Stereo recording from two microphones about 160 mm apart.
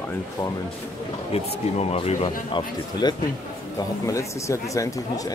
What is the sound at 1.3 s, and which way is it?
Speech, 40° left (ahead or behind).